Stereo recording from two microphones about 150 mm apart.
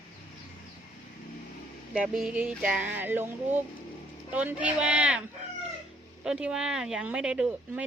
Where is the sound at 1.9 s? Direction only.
5° right (ahead or behind).